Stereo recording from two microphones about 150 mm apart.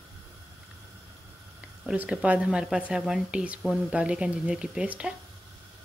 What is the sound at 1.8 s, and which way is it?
Speech, 5° right (ahead or behind).